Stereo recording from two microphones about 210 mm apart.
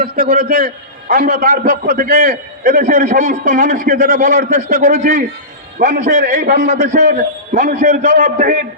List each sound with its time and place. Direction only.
0.0 s a man's voice: 45° right (ahead or behind)